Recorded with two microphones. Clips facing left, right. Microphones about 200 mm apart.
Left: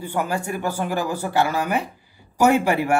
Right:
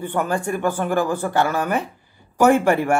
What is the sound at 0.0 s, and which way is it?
Speech, 10° left (ahead or behind).